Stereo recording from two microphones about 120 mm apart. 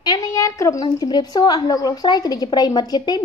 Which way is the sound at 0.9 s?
35° left (ahead or behind).